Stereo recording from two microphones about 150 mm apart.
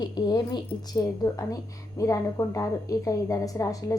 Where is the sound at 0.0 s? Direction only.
30° left (ahead or behind).